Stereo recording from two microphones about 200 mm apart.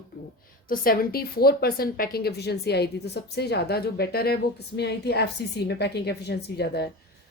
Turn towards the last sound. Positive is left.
turn(degrees=55)  # may be behind; listen again after turning